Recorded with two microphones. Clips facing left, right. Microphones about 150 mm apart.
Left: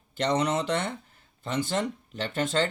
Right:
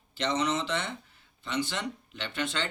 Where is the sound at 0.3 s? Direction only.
55° left (ahead or behind).